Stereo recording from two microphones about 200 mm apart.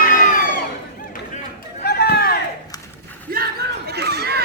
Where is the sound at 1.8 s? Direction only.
50° left (ahead or behind).